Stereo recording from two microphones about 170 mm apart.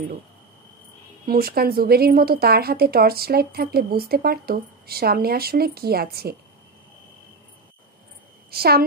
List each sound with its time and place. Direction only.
1.2 s speech: 60° right (ahead or behind)
8.5 s a woman's voice: 65° right (ahead or behind)